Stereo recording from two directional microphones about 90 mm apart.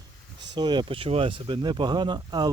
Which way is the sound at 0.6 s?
55° right (ahead or behind).